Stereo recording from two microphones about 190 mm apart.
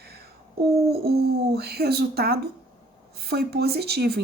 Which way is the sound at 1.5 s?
55° right (ahead or behind).